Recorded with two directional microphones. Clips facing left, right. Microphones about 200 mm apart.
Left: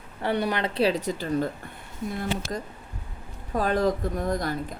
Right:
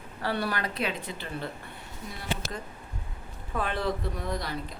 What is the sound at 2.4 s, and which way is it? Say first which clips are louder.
Speech: left 5 dB; 45° right (ahead or behind).